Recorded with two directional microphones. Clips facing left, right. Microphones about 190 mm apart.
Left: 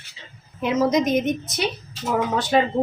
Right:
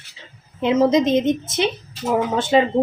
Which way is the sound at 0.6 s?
25° right (ahead or behind).